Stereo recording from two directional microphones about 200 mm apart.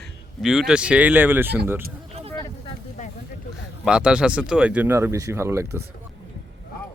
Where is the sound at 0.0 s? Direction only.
Centre (ahead or behind).